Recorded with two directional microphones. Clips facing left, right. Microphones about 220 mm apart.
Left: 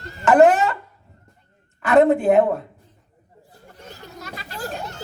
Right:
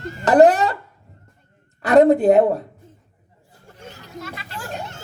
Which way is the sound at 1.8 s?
35° right (ahead or behind).